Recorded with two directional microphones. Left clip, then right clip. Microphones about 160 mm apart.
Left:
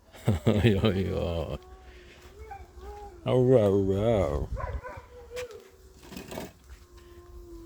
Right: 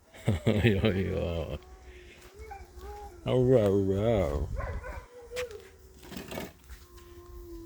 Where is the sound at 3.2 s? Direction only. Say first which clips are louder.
Left 2 dB; 25° left (ahead or behind).